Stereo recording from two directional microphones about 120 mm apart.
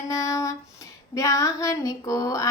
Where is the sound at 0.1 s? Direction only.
25° left (ahead or behind).